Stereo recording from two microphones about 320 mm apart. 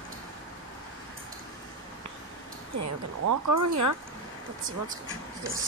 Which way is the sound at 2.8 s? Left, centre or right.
Right.